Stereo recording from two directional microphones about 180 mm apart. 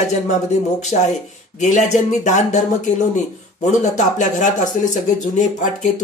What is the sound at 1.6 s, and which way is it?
Speech, 40° left (ahead or behind).